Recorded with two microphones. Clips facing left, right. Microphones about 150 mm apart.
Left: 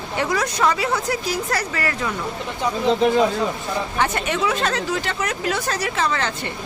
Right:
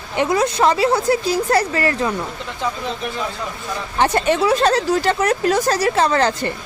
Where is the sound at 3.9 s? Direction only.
30° right (ahead or behind).